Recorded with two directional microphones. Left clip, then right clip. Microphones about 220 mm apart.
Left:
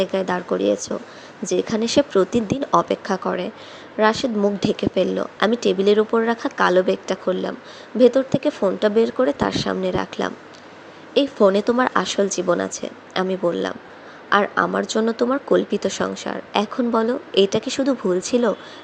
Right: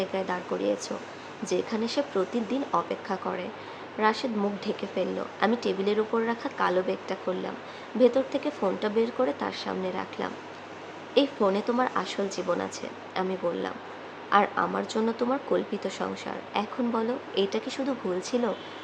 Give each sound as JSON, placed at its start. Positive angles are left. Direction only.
{"t": 0.0, "sound": "speech", "side_deg": 30}